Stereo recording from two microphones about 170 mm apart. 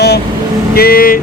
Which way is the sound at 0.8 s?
60° left (ahead or behind).